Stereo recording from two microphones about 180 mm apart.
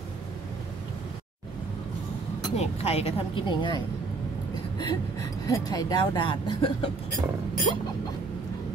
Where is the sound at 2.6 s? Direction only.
35° left (ahead or behind).